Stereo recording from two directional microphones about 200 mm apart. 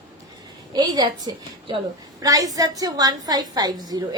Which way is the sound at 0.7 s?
20° right (ahead or behind).